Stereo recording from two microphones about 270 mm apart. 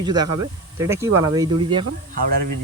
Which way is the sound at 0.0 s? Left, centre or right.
Centre.